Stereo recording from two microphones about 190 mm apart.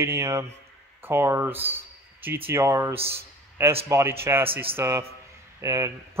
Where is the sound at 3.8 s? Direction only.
15° right (ahead or behind).